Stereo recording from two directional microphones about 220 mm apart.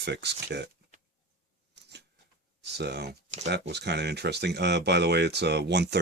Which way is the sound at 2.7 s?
50° right (ahead or behind).